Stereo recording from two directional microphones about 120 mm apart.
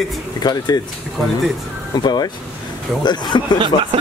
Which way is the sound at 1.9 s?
35° left (ahead or behind).